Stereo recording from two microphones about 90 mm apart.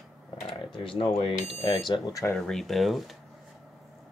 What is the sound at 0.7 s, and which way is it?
Computer keyboard, 75° left (ahead or behind).